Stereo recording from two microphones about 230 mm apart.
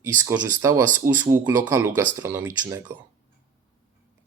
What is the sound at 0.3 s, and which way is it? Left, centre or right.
Speech, centre.